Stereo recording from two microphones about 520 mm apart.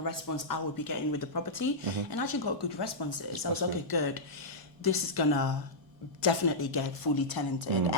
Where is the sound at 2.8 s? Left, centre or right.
Left.